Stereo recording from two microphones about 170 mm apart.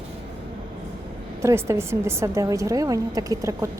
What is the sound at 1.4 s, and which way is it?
A woman's voice, 15° right (ahead or behind).